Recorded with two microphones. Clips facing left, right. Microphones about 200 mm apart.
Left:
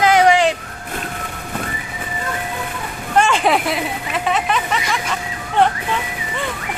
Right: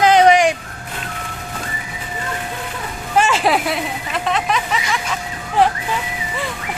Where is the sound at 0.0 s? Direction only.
20° right (ahead or behind).